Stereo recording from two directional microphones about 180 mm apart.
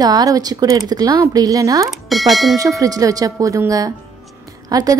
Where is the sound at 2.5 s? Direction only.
20° right (ahead or behind).